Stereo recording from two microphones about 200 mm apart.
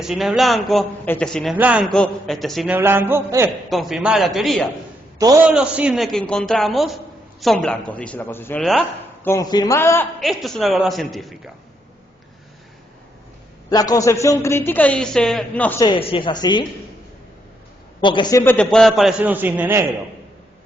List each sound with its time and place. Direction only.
0.0 s a man's voice: centre (ahead or behind)
1.5 s a sound: 5° right (ahead or behind)
3.7 s a man's voice: centre (ahead or behind)
5.2 s a man's voice: 10° right (ahead or behind); by 10.1 s 15° left (ahead or behind)
10.2 s a man's voice: centre (ahead or behind)
13.7 s a man's voice: 20° left (ahead or behind)
15.8 s a woman's voice: 25° left (ahead or behind)
18.0 s a man's voice: 25° left (ahead or behind); by 19.8 s 10° right (ahead or behind)